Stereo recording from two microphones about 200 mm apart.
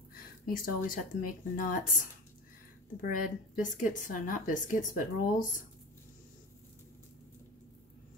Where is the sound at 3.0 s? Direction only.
45° left (ahead or behind).